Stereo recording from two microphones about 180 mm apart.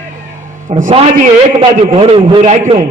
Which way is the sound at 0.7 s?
45° right (ahead or behind).